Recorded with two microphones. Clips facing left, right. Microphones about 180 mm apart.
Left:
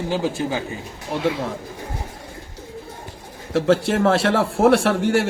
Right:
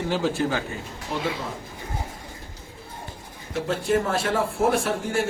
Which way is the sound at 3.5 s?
85° left.